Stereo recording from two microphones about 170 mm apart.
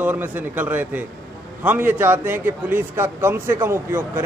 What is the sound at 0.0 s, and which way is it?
Speech, 10° right (ahead or behind).